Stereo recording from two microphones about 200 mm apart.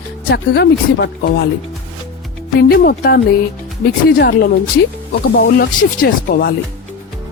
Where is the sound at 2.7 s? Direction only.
50° left (ahead or behind).